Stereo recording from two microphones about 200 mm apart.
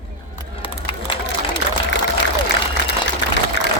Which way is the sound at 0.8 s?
25° left (ahead or behind).